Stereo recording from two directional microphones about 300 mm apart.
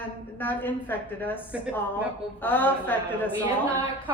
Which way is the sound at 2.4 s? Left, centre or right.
Centre.